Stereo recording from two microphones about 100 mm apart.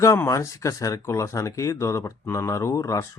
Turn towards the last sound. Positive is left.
turn(degrees=30)  # may be behind; listen again after turning